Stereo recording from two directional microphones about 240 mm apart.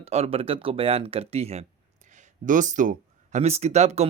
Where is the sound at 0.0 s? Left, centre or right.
Right.